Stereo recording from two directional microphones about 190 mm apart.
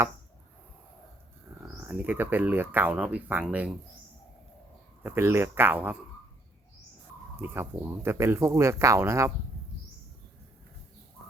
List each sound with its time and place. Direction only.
1.9 s speech: 10° right (ahead or behind)
5.0 s speech: 15° right (ahead or behind)
7.3 s speech: 10° right (ahead or behind)